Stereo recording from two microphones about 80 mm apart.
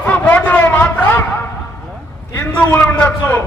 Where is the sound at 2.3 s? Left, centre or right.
Centre.